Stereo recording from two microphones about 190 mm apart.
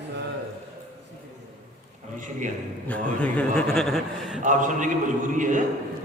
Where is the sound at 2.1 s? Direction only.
40° right (ahead or behind).